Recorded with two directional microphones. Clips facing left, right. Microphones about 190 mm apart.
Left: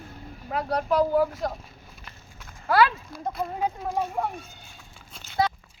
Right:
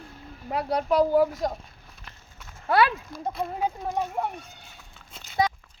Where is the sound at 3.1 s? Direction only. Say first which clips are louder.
Even; 5° left (ahead or behind).